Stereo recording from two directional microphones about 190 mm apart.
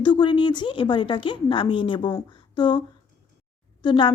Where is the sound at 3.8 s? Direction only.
25° left (ahead or behind).